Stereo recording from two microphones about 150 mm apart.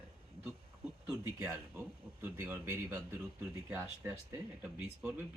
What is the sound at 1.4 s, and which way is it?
Speech, 10° right (ahead or behind).